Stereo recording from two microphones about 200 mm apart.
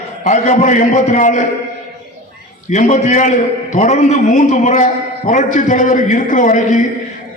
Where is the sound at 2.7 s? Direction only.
35° left (ahead or behind).